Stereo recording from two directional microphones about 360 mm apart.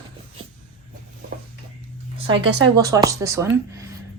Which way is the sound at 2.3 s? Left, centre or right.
Centre.